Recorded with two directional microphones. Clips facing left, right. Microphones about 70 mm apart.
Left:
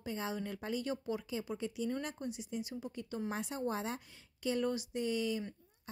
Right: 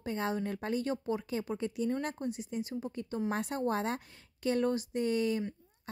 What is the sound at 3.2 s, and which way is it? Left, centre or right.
A woman's voice, right.